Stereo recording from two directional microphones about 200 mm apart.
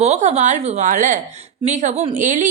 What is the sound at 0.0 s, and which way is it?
A woman's voice, 35° right (ahead or behind).